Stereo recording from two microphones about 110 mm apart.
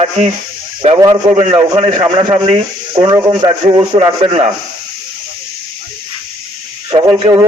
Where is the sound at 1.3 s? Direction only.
75° right (ahead or behind).